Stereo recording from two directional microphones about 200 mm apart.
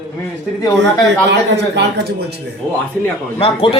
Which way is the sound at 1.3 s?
60° right (ahead or behind).